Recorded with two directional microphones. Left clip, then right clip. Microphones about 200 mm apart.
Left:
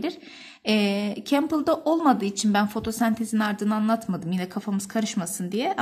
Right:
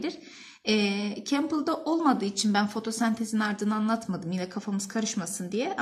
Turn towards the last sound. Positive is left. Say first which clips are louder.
# left 4 dB
turn(degrees=35)  # may be behind; listen again after turning